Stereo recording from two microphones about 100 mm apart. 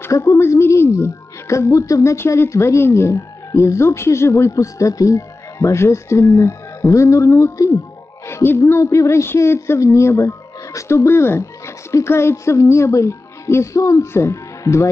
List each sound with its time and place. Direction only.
0.0 s a woman's voice: 30° left (ahead or behind)